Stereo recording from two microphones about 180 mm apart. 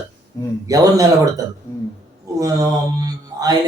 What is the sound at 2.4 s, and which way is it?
Speech, 20° right (ahead or behind).